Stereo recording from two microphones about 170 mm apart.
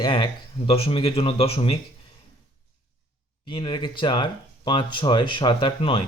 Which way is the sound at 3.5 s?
25° left (ahead or behind).